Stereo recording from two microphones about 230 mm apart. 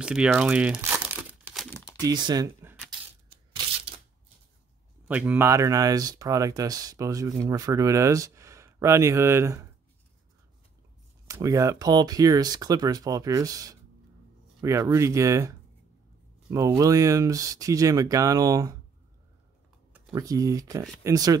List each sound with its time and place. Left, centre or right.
0.0 s crumpling: centre
2.0 s speech: centre
5.0 s speech: centre
11.2 s speech: centre
20.1 s speech: centre